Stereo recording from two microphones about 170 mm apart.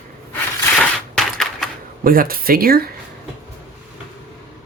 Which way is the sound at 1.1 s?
Centre (ahead or behind).